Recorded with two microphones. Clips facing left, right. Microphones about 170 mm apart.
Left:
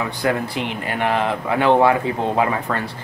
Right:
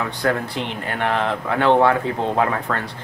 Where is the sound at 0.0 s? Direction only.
10° left (ahead or behind).